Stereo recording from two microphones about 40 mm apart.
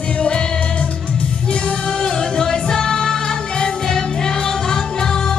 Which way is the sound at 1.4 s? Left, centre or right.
Left.